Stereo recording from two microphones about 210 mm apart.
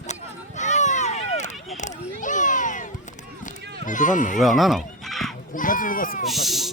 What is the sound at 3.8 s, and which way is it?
Speech, 40° left (ahead or behind).